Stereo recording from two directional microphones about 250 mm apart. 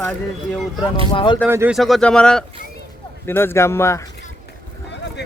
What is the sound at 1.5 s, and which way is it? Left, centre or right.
Speech, centre.